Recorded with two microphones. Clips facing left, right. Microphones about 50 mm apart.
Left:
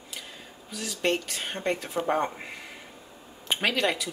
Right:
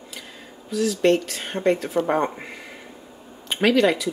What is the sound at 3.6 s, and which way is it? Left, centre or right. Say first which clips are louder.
Speech: right 9 dB; centre.